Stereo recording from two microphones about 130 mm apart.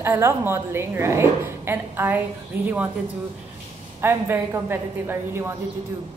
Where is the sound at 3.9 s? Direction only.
15° right (ahead or behind).